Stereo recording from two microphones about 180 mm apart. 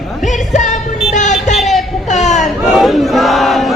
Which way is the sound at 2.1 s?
40° left (ahead or behind).